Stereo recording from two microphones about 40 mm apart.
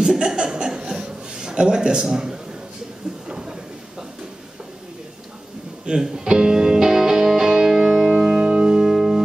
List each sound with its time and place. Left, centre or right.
0.0 s speech: centre
3.3 s a sound: right
5.9 s music: right